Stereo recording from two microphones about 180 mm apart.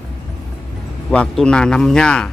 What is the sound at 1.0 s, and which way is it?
Speech, 5° left (ahead or behind).